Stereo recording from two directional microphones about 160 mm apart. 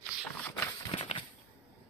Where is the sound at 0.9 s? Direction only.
35° left (ahead or behind).